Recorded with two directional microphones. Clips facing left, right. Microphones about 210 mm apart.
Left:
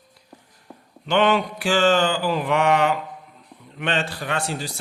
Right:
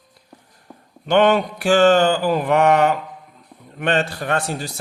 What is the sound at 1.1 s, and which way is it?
Speech, 40° right (ahead or behind).